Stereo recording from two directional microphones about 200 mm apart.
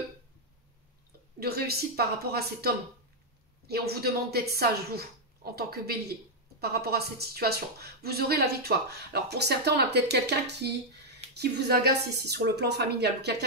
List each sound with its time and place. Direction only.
1.4 s a woman's voice: 50° right (ahead or behind)